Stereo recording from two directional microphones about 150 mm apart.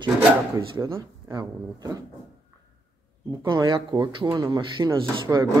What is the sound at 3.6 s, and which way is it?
Speech, 30° right (ahead or behind).